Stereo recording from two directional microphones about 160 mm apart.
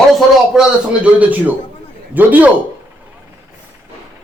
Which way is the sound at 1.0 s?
10° right (ahead or behind).